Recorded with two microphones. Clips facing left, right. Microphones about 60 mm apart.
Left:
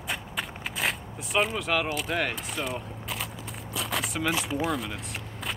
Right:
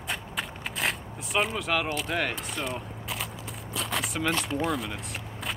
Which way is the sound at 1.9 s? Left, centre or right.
Centre.